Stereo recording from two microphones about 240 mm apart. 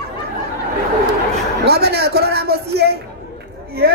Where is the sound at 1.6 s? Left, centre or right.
Right.